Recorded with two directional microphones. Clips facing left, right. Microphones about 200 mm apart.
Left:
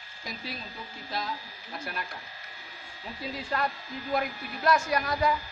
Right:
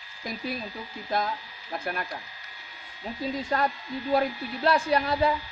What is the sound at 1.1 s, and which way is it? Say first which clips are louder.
Speech: right 6 dB; 50° right (ahead or behind).